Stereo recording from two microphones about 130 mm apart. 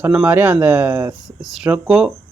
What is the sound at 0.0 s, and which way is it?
Speech, 15° right (ahead or behind).